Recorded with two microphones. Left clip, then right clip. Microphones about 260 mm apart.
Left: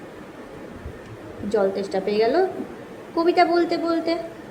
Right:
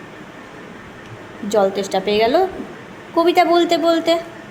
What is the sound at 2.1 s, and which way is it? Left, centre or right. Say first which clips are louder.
A woman's voice: right 4 dB; right.